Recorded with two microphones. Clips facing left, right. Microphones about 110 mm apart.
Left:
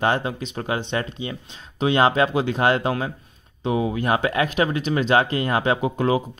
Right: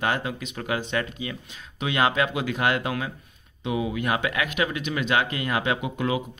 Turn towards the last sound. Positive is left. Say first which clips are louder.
# left 6 dB
turn(degrees=35)  # may be behind; listen again after turning